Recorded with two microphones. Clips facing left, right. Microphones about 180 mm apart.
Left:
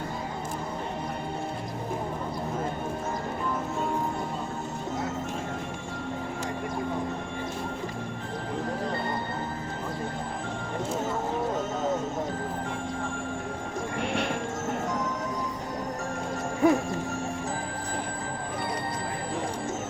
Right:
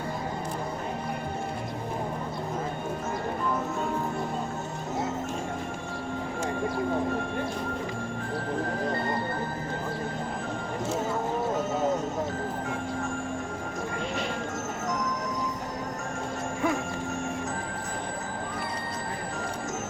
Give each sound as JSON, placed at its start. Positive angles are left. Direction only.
{"t": 16.6, "sound": "music", "side_deg": 35}